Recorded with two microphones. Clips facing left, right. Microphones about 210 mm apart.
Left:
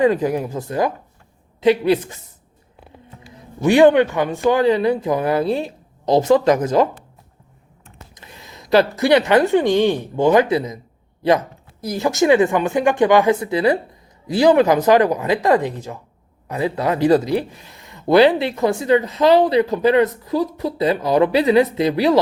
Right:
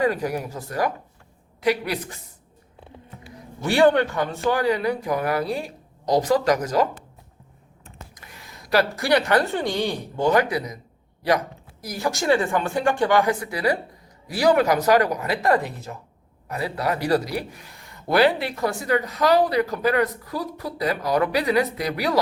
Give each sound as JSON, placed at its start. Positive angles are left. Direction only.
{"t": 0.0, "sound": "speech", "side_deg": 25}
{"t": 3.3, "sound": "speech", "side_deg": 20}
{"t": 8.1, "sound": "speech", "side_deg": 25}
{"t": 11.8, "sound": "speech", "side_deg": 25}